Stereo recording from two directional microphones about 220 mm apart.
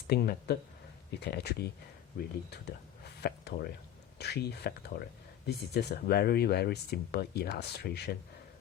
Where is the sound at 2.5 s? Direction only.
50° left (ahead or behind).